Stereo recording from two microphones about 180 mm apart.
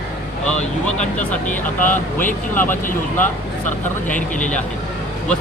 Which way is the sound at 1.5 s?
45° left (ahead or behind).